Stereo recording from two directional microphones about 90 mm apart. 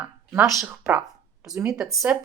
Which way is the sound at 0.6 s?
10° right (ahead or behind).